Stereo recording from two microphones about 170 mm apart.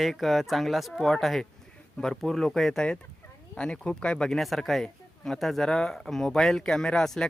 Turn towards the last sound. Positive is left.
turn(degrees=5)  # may be behind; listen again after turning